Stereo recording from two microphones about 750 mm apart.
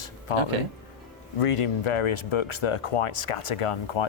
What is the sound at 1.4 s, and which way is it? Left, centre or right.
Speech, left.